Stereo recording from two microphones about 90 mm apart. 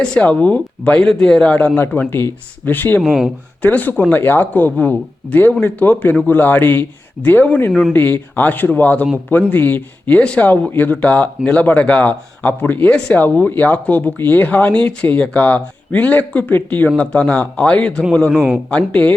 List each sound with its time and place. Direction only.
0.0 s speech: 10° left (ahead or behind)
3.0 s speech: 5° right (ahead or behind)
3.6 s speech: 20° left (ahead or behind)
18.3 s speech: 15° right (ahead or behind)
18.7 s speech: 15° left (ahead or behind)